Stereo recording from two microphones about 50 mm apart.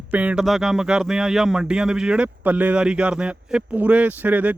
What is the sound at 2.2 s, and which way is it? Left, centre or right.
Speech, right.